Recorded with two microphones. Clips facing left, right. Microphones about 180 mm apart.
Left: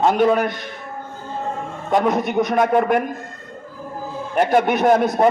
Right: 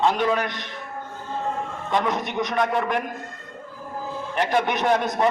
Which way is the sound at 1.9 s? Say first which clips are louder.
Left 7 dB; 50° left (ahead or behind).